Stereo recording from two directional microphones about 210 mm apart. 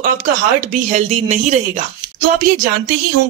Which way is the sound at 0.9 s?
35° right (ahead or behind).